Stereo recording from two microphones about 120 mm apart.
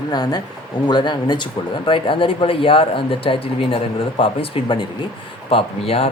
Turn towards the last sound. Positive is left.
turn(degrees=55)  # may be behind; listen again after turning